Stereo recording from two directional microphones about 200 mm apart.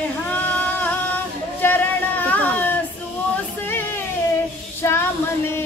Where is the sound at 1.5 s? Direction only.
10° left (ahead or behind).